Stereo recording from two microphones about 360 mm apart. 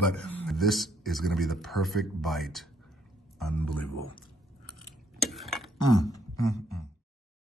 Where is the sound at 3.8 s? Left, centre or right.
Right.